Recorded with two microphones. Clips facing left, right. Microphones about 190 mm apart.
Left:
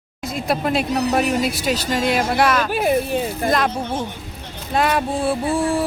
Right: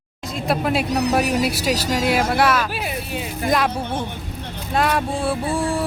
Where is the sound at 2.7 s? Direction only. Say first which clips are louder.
Left 9 dB; 50° left (ahead or behind).